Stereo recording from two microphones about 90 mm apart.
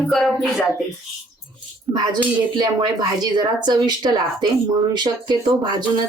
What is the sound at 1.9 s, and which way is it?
Speech, 5° right (ahead or behind).